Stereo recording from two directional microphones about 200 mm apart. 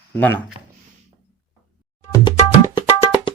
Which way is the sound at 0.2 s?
10° left (ahead or behind).